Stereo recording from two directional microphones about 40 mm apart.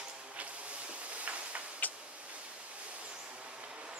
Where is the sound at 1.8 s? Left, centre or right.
Left.